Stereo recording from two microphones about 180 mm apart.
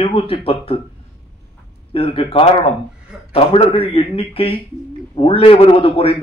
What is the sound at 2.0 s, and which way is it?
A man's voice, 30° left (ahead or behind).